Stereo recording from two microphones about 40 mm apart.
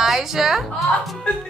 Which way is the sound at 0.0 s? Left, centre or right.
Centre.